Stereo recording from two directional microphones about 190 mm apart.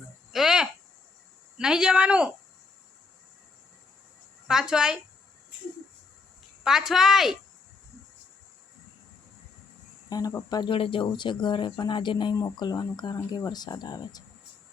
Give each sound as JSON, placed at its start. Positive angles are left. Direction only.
{"t": 0.3, "sound": "a sound", "side_deg": -5}
{"t": 1.5, "sound": "speech", "side_deg": -5}
{"t": 4.4, "sound": "speech", "side_deg": -5}
{"t": 6.7, "sound": "speech", "side_deg": 0}
{"t": 10.1, "sound": "speech", "side_deg": 20}